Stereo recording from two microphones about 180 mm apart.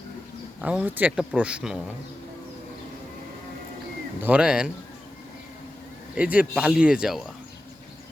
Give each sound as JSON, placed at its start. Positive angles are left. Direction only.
{"t": 0.6, "sound": "speech", "side_deg": -5}
{"t": 4.2, "sound": "speech", "side_deg": -5}
{"t": 6.1, "sound": "speech", "side_deg": -10}